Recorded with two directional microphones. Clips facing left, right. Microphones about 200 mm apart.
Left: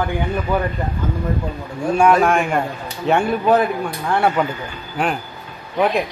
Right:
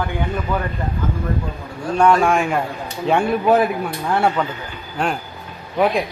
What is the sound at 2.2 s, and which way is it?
Speech, centre (ahead or behind).